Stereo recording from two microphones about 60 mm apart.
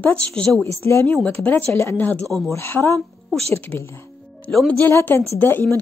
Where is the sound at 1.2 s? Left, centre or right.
Left.